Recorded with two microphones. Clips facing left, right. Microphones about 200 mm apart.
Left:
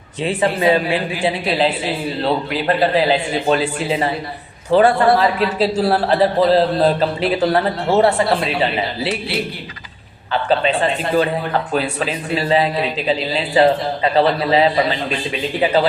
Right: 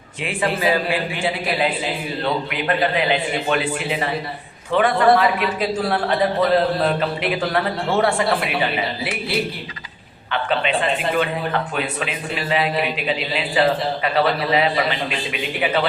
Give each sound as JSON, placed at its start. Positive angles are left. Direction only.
{"t": 0.3, "sound": "a man's voice", "side_deg": 25}
{"t": 10.3, "sound": "a man's voice", "side_deg": 35}
{"t": 11.7, "sound": "a man's voice", "side_deg": 35}